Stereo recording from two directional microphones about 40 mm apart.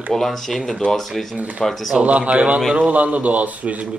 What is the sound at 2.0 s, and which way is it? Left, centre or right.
A man's voice, right.